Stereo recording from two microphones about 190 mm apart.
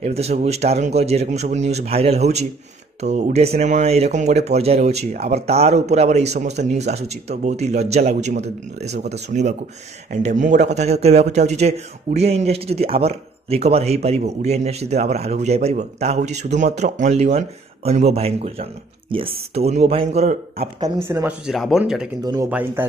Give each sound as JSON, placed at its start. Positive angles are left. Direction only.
{"t": 0.0, "sound": "a man's voice", "side_deg": -35}
{"t": 20.8, "sound": "speech", "side_deg": -15}
{"t": 21.5, "sound": "speech", "side_deg": 0}
{"t": 22.2, "sound": "speech", "side_deg": -20}
{"t": 22.5, "sound": "speech", "side_deg": -10}